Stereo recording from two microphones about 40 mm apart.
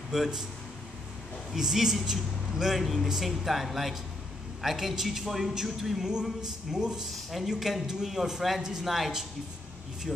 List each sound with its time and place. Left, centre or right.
0.1 s a man's voice: centre
1.5 s a man's voice: centre
2.8 s a man's voice: centre
10.1 s a man's voice: centre